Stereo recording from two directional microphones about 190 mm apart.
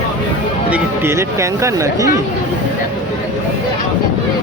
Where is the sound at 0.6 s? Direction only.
10° right (ahead or behind).